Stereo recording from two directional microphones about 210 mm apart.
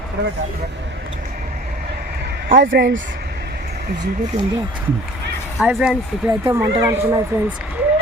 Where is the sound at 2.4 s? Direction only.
45° right (ahead or behind).